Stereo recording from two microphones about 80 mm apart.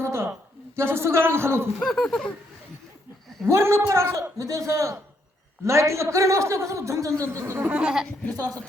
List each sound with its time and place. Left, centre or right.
0.0 s a sound: right
0.8 s a man's voice: right
1.8 s speech: centre
3.4 s a man's voice: right
7.7 s goat: centre